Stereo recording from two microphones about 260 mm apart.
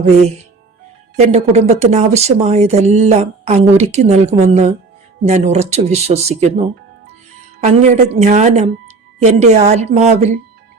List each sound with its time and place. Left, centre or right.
0.0 s speech: right
7.6 s speech: right